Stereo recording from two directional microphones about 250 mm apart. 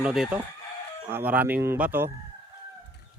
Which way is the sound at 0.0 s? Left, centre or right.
Centre.